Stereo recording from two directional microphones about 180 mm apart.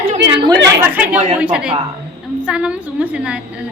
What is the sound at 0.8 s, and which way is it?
A woman's voice, 10° right (ahead or behind).